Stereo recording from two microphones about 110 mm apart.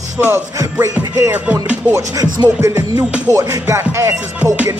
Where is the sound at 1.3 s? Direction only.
15° right (ahead or behind).